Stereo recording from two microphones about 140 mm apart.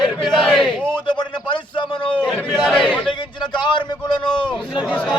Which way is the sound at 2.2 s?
5° left (ahead or behind).